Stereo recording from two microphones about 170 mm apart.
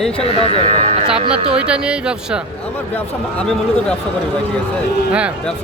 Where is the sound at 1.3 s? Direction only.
5° right (ahead or behind).